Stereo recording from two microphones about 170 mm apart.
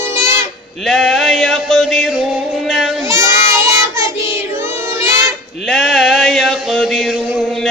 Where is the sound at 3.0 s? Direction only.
15° right (ahead or behind).